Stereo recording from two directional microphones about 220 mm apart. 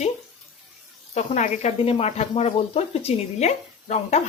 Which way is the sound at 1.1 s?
30° left (ahead or behind).